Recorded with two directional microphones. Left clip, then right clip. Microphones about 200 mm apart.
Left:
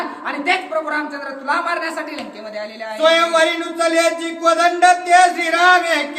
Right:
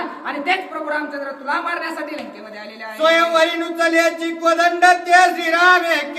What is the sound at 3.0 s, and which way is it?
Speech, 15° right (ahead or behind).